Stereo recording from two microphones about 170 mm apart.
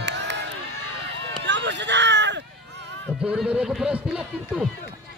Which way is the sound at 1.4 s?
90° right.